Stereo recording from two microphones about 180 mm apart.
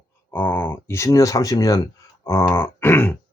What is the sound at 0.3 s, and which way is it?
Speech, 10° left (ahead or behind).